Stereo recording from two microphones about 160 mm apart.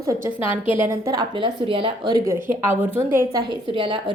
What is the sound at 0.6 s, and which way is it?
Speech, 35° left (ahead or behind).